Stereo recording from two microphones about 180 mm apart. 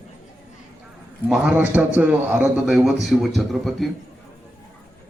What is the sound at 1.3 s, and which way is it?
A man's voice, 5° right (ahead or behind).